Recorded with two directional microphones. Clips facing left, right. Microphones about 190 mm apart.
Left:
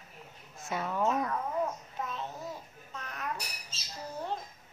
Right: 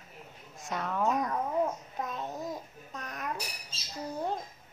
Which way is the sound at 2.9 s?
40° right (ahead or behind).